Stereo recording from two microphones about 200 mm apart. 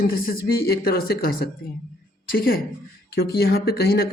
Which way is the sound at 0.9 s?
50° left (ahead or behind).